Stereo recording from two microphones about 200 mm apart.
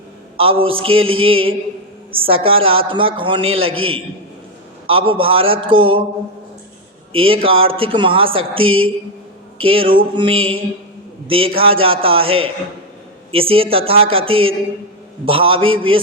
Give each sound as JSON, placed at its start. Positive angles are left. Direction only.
{"t": 0.3, "sound": "speech", "side_deg": -25}
{"t": 7.1, "sound": "speech", "side_deg": -25}